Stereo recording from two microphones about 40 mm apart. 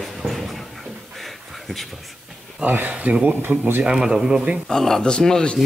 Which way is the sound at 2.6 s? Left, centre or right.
Right.